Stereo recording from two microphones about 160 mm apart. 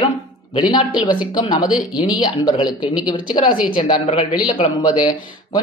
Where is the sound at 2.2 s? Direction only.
25° left (ahead or behind).